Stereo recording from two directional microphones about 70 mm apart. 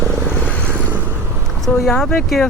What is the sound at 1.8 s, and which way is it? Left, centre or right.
Speech, centre.